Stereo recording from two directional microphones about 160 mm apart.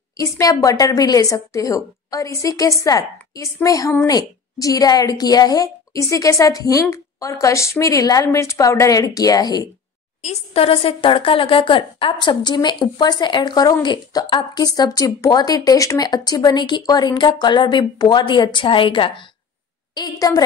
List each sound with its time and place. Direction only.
0.2 s a woman's voice: 20° left (ahead or behind)
10.2 s a woman's voice: 40° left (ahead or behind); by 20.4 s 25° left (ahead or behind)